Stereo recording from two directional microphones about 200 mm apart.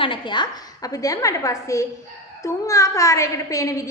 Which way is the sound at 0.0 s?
25° left (ahead or behind).